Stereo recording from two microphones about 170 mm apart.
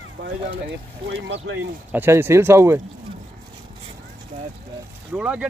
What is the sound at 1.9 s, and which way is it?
Speech, 10° right (ahead or behind).